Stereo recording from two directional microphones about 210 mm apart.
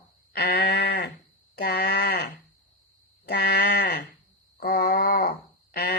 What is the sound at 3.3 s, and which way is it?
Sheep, 50° left (ahead or behind).